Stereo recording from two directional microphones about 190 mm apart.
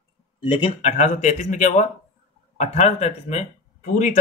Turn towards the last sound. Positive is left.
turn(degrees=35)  # may be behind; listen again after turning